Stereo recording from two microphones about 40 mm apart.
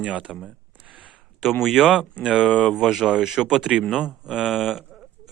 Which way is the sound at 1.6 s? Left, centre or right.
Centre.